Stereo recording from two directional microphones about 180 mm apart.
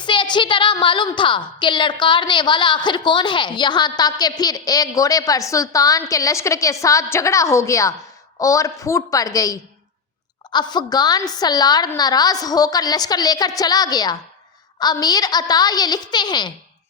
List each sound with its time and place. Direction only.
0.0 s a woman's voice: 25° left (ahead or behind)